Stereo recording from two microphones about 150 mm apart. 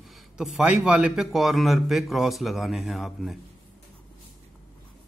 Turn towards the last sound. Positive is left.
turn(degrees=0)  # may be behind; listen again after turning